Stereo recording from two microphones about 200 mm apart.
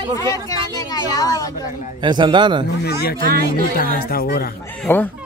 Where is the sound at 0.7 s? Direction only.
20° left (ahead or behind).